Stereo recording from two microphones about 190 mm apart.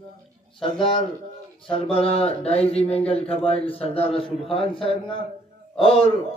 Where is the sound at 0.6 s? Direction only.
25° left (ahead or behind).